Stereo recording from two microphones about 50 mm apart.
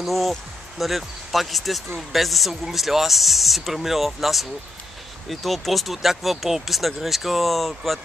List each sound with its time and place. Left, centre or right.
0.0 s speech: centre